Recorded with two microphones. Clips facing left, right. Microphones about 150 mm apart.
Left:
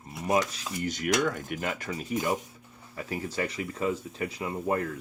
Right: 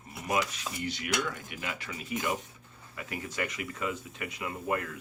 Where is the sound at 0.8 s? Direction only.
45° left (ahead or behind).